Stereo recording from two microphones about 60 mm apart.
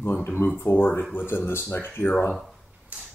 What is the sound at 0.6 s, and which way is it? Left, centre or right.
Speech, left.